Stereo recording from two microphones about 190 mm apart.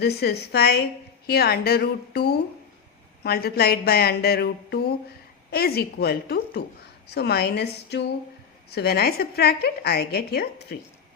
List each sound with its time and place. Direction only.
0.0 s a woman's voice: 60° left (ahead or behind)